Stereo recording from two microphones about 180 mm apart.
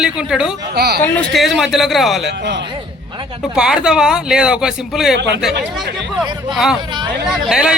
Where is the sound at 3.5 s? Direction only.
5° right (ahead or behind).